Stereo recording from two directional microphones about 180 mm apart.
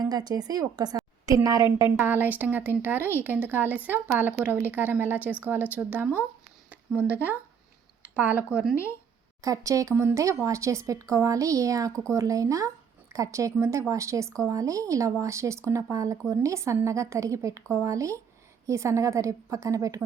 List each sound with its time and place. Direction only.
0.0 s a woman's voice: 20° right (ahead or behind)
9.4 s a woman's voice: 20° right (ahead or behind)